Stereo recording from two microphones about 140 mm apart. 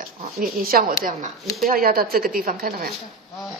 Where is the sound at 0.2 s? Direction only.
85° right.